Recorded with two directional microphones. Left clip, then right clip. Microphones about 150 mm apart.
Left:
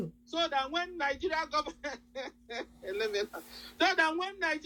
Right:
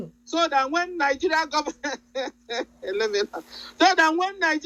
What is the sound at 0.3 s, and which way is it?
Speech, 40° right (ahead or behind).